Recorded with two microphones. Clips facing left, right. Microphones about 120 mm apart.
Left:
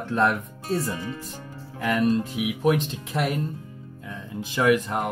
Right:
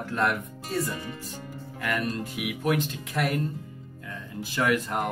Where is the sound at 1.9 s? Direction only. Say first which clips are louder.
Left 8 dB; 15° left (ahead or behind).